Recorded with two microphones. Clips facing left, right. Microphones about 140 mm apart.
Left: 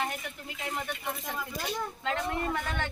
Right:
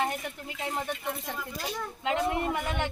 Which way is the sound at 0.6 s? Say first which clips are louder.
Right 3 dB; 25° right (ahead or behind).